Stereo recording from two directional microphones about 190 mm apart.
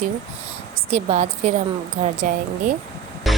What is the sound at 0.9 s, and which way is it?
A woman's voice, 35° right (ahead or behind).